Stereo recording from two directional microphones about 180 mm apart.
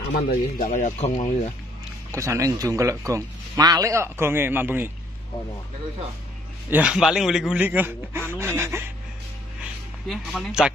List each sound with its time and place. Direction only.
0.3 s speech: 45° left (ahead or behind)
2.1 s a man's voice: 15° right (ahead or behind)
6.7 s a man's voice: 5° right (ahead or behind)
10.0 s speech: centre (ahead or behind)